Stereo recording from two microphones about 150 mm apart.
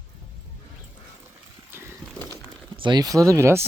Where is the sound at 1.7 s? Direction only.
15° right (ahead or behind).